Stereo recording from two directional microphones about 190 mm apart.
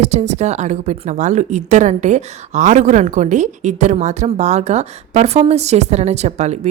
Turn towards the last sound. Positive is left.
turn(degrees=-35)  # may be behind; listen again after turning